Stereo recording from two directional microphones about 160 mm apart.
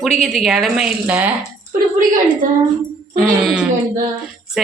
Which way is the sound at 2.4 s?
55° right (ahead or behind).